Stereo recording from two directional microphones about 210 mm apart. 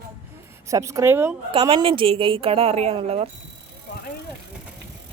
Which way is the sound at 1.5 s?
25° right (ahead or behind).